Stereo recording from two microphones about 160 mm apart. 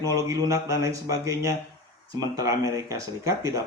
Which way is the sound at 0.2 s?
20° right (ahead or behind).